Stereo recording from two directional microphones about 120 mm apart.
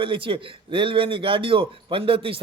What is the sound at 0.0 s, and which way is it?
Speech, 45° right (ahead or behind).